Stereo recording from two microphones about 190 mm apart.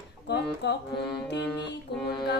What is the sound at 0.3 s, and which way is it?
Music, 65° left (ahead or behind).